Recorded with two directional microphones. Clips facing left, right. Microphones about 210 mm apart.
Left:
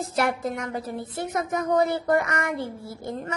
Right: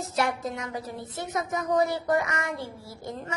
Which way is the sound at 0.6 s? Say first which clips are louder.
Left 4 dB; 55° left (ahead or behind).